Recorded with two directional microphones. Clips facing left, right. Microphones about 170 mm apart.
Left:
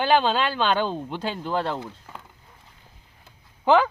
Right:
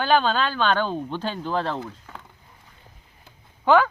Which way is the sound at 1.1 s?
5° left (ahead or behind).